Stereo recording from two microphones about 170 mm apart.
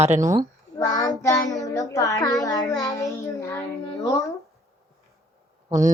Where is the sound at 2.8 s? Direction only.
15° left (ahead or behind).